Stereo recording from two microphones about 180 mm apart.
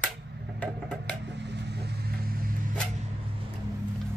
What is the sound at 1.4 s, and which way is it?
Vehicle, 70° right (ahead or behind).